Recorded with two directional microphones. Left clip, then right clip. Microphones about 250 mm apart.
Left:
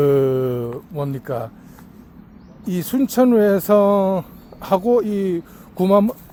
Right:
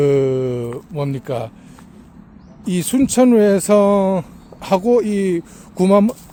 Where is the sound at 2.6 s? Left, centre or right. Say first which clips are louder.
Right 3 dB; centre.